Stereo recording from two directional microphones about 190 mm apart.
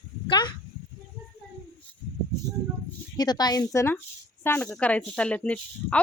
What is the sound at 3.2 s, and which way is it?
Speech, 20° left (ahead or behind).